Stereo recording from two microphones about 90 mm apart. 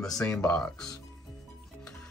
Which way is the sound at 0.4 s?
10° left (ahead or behind).